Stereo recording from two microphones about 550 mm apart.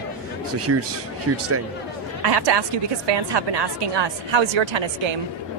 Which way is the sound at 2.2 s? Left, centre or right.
Right.